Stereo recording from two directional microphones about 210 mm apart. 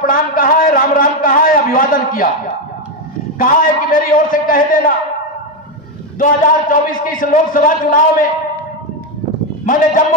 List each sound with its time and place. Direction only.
0.0 s a sound: 40° left (ahead or behind)
3.3 s a man's voice: 40° left (ahead or behind)
6.1 s a man's voice: 40° left (ahead or behind)